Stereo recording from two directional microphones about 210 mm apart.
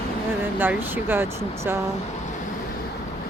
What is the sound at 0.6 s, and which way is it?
Speech, 10° right (ahead or behind).